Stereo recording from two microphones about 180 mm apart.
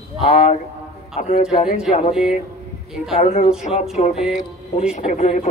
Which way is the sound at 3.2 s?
40° left (ahead or behind).